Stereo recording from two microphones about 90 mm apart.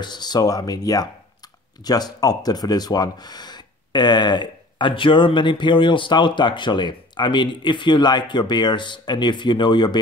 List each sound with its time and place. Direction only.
0.0 s speech: 55° left (ahead or behind)